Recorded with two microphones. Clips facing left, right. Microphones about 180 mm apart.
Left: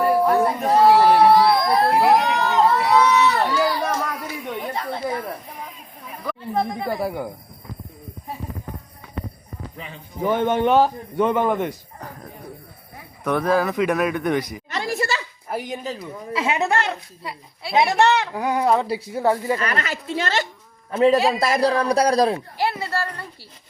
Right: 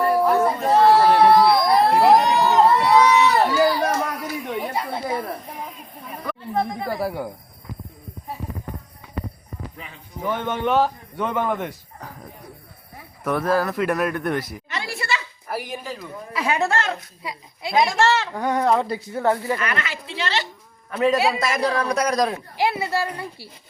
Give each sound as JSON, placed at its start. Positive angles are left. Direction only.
{"t": 0.0, "sound": "a sound", "side_deg": 5}
{"t": 6.6, "sound": "speech", "side_deg": 20}
{"t": 9.7, "sound": "speech", "side_deg": 25}
{"t": 10.3, "sound": "a man's voice", "side_deg": 40}
{"t": 11.2, "sound": "speech", "side_deg": 0}
{"t": 12.0, "sound": "a sound", "side_deg": -5}
{"t": 13.2, "sound": "speech", "side_deg": -5}
{"t": 14.7, "sound": "a sound", "side_deg": 45}
{"t": 15.4, "sound": "a woman's voice", "side_deg": 20}
{"t": 17.2, "sound": "a child's voice", "side_deg": -20}
{"t": 17.7, "sound": "speech", "side_deg": 20}
{"t": 19.5, "sound": "a woman's voice", "side_deg": 35}
{"t": 20.9, "sound": "a man's voice", "side_deg": 25}
{"t": 22.5, "sound": "speech", "side_deg": -15}